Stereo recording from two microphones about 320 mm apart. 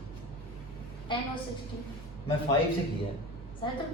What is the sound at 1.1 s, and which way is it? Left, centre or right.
Speech, centre.